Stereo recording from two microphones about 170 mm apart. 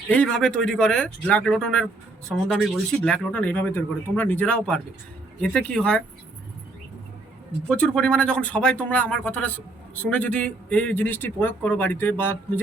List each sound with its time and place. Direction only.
0.1 s speech: 5° left (ahead or behind)
7.7 s speech: 5° left (ahead or behind)